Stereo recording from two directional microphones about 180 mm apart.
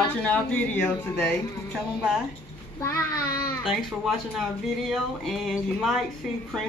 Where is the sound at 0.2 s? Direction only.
10° left (ahead or behind).